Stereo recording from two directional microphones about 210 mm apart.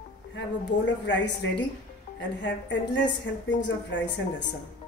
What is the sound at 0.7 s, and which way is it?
Speech, 55° left (ahead or behind).